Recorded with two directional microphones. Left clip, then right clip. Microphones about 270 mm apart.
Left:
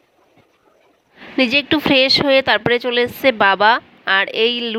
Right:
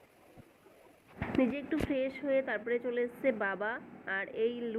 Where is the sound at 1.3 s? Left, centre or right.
Left.